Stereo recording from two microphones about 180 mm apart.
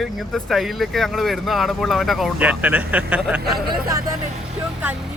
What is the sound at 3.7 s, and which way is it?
Speech, 20° right (ahead or behind).